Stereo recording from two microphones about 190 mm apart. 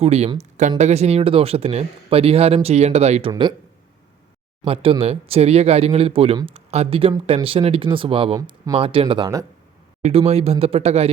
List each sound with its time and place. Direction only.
0.0 s speech: 30° right (ahead or behind)
4.6 s speech: 30° right (ahead or behind)
10.0 s speech: 30° right (ahead or behind)